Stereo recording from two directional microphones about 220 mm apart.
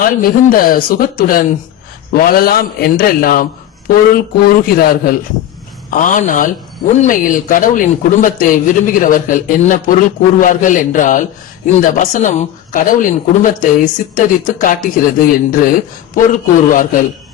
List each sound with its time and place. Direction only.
0.0 s speech: 40° left (ahead or behind)
16.1 s speech: 35° left (ahead or behind)